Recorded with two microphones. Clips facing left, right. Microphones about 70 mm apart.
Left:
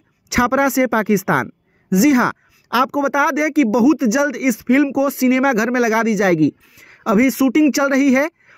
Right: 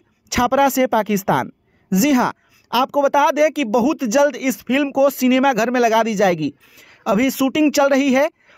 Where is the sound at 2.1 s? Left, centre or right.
Left.